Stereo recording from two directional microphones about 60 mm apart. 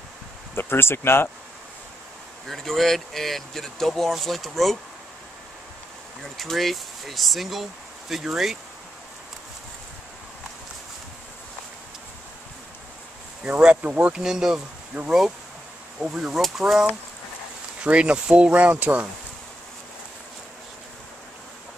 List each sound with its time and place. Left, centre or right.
0.6 s speech: left
2.4 s speech: centre
6.3 s speech: centre
13.4 s speech: centre
14.1 s speech: centre
14.9 s speech: right
16.3 s speech: centre
17.8 s speech: centre